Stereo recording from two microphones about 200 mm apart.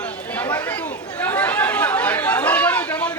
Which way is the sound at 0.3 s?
10° left (ahead or behind).